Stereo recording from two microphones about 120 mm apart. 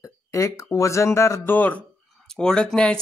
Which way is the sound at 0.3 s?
25° left (ahead or behind).